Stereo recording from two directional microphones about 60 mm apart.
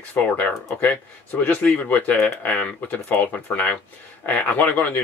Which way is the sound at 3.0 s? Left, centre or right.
Left.